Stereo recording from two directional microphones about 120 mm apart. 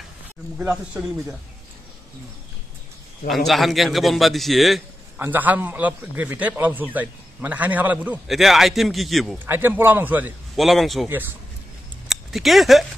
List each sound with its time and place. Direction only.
0.6 s a man's voice: 10° right (ahead or behind)
3.3 s a man's voice: centre (ahead or behind)
5.1 s a man's voice: 15° right (ahead or behind)
8.3 s a man's voice: centre (ahead or behind)
9.5 s a man's voice: 15° right (ahead or behind)
10.5 s a man's voice: centre (ahead or behind)
11.1 s a man's voice: 15° right (ahead or behind)
12.1 s speech: centre (ahead or behind)